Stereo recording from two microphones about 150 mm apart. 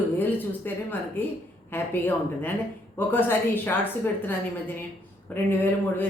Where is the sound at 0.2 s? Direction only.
15° left (ahead or behind).